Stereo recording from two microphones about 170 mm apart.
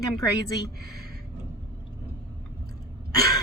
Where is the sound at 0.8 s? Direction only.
65° right (ahead or behind).